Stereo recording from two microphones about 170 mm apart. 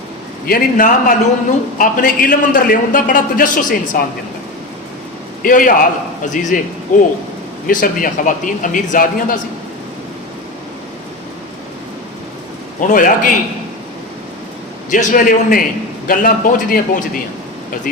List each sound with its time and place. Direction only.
0.4 s a man's voice: 55° left (ahead or behind)
5.4 s a man's voice: 50° left (ahead or behind)
12.8 s a man's voice: 50° left (ahead or behind)
14.8 s a man's voice: 50° left (ahead or behind)